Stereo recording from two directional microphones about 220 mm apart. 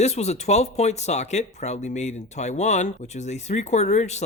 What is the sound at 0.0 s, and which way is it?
Speech, 30° left (ahead or behind).